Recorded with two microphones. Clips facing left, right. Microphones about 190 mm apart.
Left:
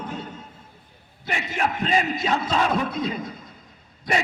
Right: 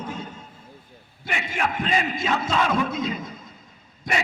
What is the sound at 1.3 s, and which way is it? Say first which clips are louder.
Speech: left 1 dB; 40° left (ahead or behind).